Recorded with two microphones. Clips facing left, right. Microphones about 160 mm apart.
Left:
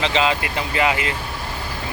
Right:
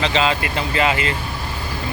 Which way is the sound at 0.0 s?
15° left (ahead or behind).